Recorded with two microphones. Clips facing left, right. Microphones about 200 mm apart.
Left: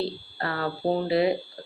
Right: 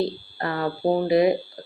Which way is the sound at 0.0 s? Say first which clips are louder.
Right 4 dB; 20° right (ahead or behind).